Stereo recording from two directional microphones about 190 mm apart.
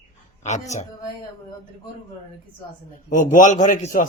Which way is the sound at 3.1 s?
45° left (ahead or behind).